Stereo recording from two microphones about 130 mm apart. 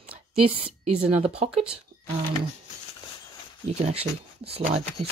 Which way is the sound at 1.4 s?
55° right (ahead or behind).